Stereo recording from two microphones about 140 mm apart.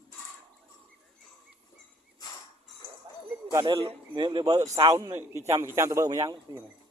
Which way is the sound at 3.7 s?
40° right (ahead or behind).